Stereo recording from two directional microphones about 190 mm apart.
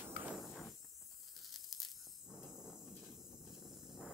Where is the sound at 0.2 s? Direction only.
5° right (ahead or behind).